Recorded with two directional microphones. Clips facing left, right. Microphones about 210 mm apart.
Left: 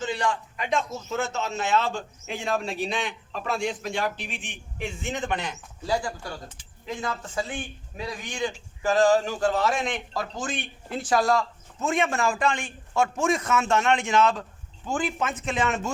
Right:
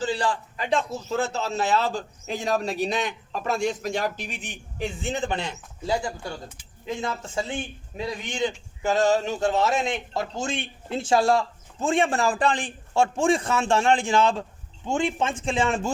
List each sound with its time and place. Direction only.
0.0 s a man's voice: 30° right (ahead or behind)